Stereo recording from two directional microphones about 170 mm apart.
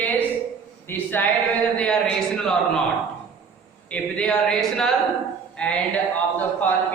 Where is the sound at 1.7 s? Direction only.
5° left (ahead or behind).